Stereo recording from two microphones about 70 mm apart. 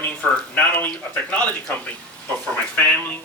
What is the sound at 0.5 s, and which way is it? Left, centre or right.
Speech, left.